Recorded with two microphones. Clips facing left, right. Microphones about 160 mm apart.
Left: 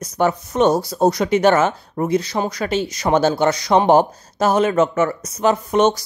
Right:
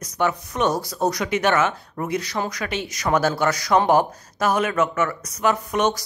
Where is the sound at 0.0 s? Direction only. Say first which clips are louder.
Left 4 dB; 30° left (ahead or behind).